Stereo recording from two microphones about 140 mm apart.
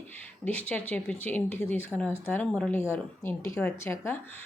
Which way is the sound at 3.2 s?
20° left (ahead or behind).